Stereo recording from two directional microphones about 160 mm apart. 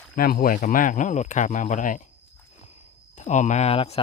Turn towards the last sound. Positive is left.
turn(degrees=35)  # may be behind; listen again after turning